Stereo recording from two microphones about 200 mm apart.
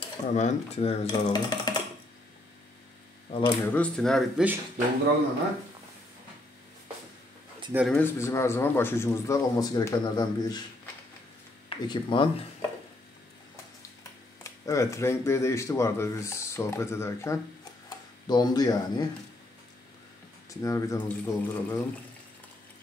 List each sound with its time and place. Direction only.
0.3 s speech: 35° left (ahead or behind)
3.3 s speech: 30° left (ahead or behind)
3.6 s speech: 5° left (ahead or behind)
7.7 s speech: centre (ahead or behind)
8.0 s speech: 15° left (ahead or behind)
11.7 s speech: 25° left (ahead or behind)
14.4 s speech: 15° left (ahead or behind)
20.4 s speech: 15° left (ahead or behind)